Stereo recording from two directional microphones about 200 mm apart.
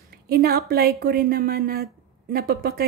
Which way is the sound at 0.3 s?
50° right (ahead or behind).